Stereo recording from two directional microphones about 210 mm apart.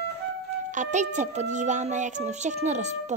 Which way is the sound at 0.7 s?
35° right (ahead or behind).